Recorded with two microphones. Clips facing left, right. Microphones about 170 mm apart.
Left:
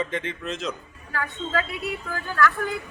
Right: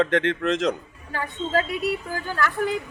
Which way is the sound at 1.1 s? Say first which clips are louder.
Right 3 dB; 30° right (ahead or behind).